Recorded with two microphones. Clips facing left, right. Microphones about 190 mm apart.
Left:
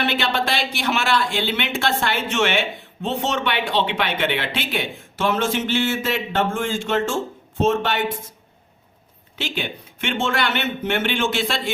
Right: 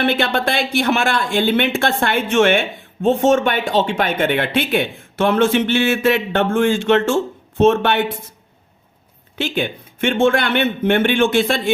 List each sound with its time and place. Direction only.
0.0 s a man's voice: 55° right (ahead or behind)
9.4 s a man's voice: 50° right (ahead or behind)